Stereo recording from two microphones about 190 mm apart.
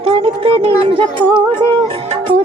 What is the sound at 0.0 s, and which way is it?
Speech, 30° right (ahead or behind).